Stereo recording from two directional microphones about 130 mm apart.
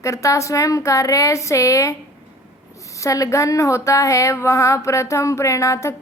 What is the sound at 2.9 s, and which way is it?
Speech, 25° left (ahead or behind).